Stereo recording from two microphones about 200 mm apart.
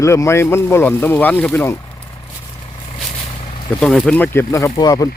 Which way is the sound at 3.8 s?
5° left (ahead or behind).